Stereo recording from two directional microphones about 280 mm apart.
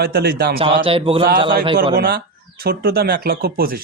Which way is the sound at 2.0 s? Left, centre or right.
Right.